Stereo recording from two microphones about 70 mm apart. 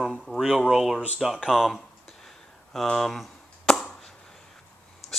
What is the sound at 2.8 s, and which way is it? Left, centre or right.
Speech, centre.